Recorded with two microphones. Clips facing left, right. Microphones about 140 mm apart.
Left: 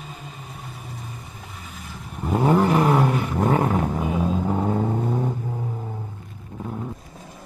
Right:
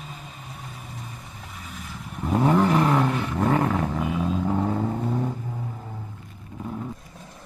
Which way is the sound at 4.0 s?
30° left (ahead or behind).